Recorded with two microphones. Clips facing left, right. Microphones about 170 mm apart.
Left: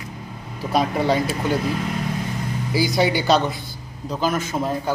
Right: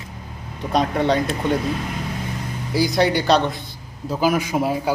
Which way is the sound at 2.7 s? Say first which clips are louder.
Right 2 dB; centre (ahead or behind).